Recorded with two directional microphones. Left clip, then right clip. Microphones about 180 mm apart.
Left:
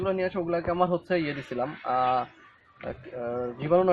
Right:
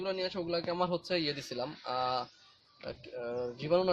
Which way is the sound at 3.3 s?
35° right (ahead or behind).